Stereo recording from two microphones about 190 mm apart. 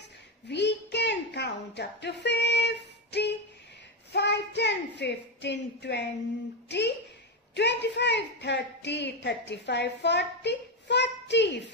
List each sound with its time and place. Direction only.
0.5 s a sound: 65° left (ahead or behind)
4.1 s child singing: 65° left (ahead or behind)
7.5 s a woman's voice: 65° left (ahead or behind)